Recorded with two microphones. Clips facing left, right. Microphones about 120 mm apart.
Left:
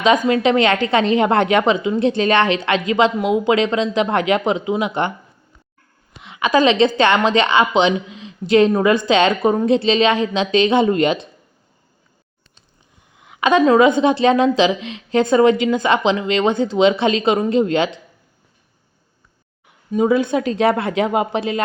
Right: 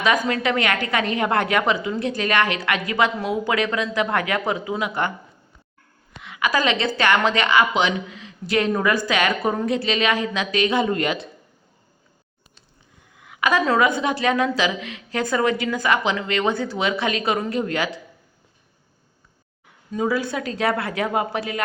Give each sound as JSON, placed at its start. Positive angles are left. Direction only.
{"t": 0.0, "sound": "a woman's voice", "side_deg": 20}
{"t": 6.2, "sound": "a woman's voice", "side_deg": 20}
{"t": 13.1, "sound": "a woman's voice", "side_deg": 25}
{"t": 19.9, "sound": "a woman's voice", "side_deg": 20}